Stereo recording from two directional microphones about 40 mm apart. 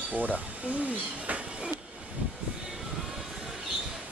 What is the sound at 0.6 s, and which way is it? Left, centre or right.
Speech, right.